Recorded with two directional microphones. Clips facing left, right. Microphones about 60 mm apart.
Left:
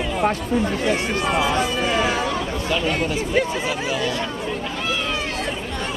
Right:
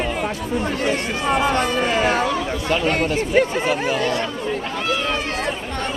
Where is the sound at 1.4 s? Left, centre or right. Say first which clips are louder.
Right 2 dB; right.